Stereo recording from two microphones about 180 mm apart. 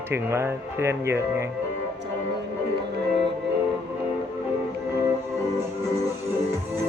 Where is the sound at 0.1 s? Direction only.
15° right (ahead or behind).